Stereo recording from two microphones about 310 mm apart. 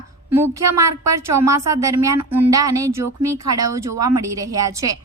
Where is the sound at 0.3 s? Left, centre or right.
Centre.